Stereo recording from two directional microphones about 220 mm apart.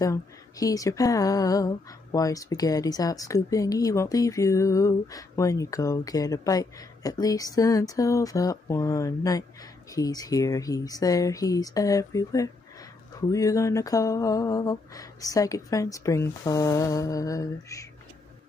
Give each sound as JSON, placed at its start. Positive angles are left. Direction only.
{"t": 0.0, "sound": "speech", "side_deg": 15}